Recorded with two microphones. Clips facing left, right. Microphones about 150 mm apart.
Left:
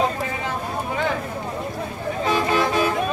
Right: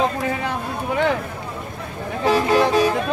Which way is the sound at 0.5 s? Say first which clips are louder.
Right 2 dB; 65° right (ahead or behind).